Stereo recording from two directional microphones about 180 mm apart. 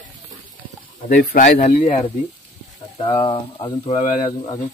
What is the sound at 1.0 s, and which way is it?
Speech, 50° left (ahead or behind).